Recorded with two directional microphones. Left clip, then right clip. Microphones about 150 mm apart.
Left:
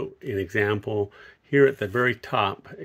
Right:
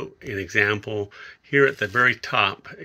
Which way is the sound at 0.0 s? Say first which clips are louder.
Left 1 dB; 40° left (ahead or behind).